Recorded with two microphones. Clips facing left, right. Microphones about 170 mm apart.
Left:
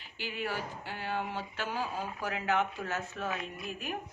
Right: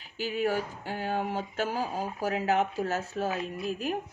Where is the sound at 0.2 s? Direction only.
40° right (ahead or behind).